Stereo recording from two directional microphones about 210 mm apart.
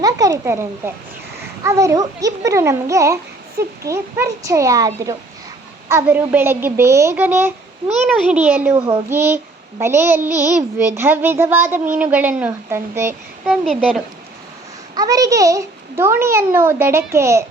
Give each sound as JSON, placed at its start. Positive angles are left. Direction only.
{"t": 0.0, "sound": "a woman's voice", "side_deg": -15}
{"t": 14.9, "sound": "a woman's voice", "side_deg": -15}